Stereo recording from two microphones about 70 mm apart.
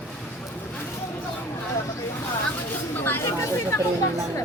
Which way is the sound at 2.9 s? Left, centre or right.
Left.